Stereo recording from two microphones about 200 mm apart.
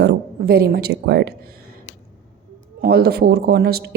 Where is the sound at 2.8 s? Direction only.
50° right (ahead or behind).